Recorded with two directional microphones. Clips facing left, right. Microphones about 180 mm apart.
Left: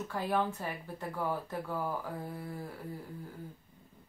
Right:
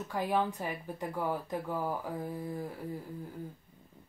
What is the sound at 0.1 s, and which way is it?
Speech, 15° right (ahead or behind).